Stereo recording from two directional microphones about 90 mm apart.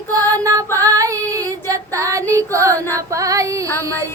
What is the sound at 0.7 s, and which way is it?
Female singing, 40° right (ahead or behind).